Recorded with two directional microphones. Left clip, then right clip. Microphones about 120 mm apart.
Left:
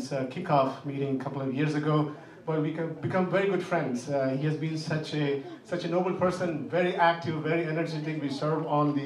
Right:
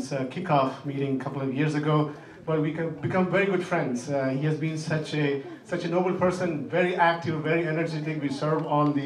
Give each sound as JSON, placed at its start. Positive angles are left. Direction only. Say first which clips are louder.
{"t": 0.1, "sound": "a man's voice", "louder": "right 1 dB", "side_deg": 10}
{"t": 3.1, "sound": "a man's voice", "louder": "right 2 dB", "side_deg": 10}